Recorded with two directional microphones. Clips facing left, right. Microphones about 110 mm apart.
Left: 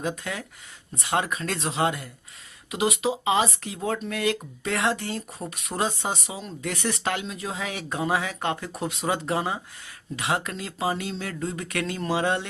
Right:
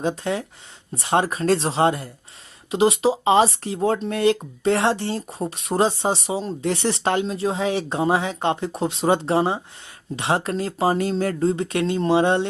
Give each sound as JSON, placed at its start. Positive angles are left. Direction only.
{"t": 0.0, "sound": "speech", "side_deg": -30}